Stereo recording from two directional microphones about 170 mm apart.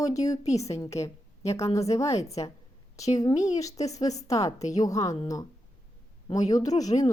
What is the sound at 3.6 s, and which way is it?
A woman's voice, 20° left (ahead or behind).